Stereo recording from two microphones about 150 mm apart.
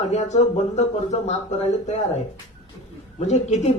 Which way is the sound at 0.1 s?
45° left (ahead or behind).